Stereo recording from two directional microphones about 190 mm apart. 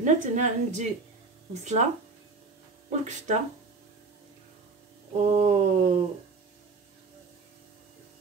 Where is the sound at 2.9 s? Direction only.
40° right (ahead or behind).